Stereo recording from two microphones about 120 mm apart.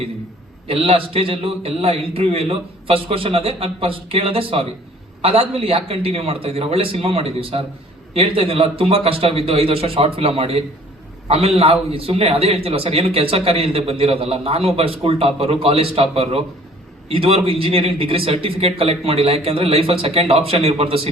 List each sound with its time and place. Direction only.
0.7 s a man's voice: 50° right (ahead or behind)